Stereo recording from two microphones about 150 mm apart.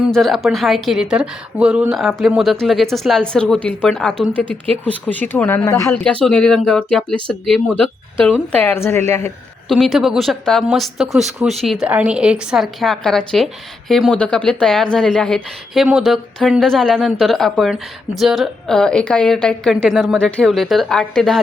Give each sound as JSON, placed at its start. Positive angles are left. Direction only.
{"t": 0.0, "sound": "a woman's voice", "side_deg": 0}
{"t": 5.9, "sound": "a woman's voice", "side_deg": 5}
{"t": 9.6, "sound": "a woman's voice", "side_deg": 0}